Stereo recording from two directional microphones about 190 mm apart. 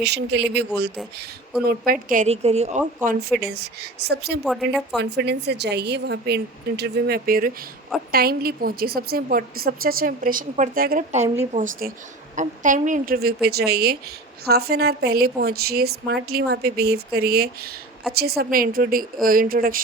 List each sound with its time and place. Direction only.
0.0 s a woman's voice: 60° right (ahead or behind)
1.6 s a woman's voice: 50° right (ahead or behind)
3.5 s a woman's voice: 55° right (ahead or behind)
4.4 s a woman's voice: centre (ahead or behind)
4.9 s a woman's voice: 65° right (ahead or behind)